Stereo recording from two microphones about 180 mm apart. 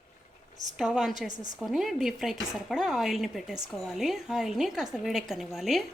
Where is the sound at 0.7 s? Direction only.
5° right (ahead or behind).